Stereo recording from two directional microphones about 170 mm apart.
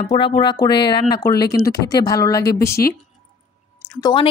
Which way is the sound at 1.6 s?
75° left (ahead or behind).